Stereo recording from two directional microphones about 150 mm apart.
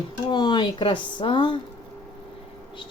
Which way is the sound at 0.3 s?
30° left (ahead or behind).